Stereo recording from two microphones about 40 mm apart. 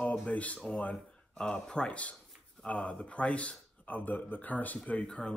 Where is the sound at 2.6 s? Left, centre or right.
Left.